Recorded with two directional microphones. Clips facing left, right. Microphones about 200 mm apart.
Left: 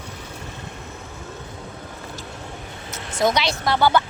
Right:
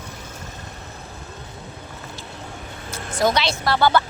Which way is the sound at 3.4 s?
15° left (ahead or behind).